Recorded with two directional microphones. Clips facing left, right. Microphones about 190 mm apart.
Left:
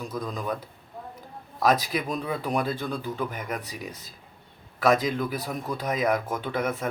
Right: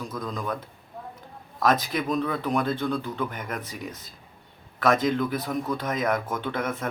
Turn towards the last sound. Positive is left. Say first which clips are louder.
# left 1 dB
turn(degrees=10)  # may be behind; listen again after turning